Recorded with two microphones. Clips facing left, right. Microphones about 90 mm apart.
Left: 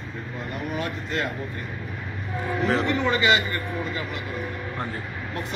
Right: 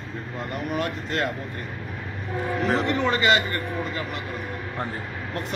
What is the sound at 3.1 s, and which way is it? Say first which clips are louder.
A man's voice: even; 45° right (ahead or behind).